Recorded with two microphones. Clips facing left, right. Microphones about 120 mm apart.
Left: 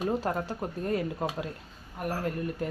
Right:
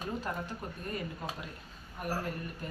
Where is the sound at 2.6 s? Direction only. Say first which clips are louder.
Left 11 dB; 90° left.